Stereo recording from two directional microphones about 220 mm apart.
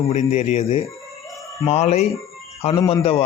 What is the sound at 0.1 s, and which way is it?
Speech, 30° left (ahead or behind).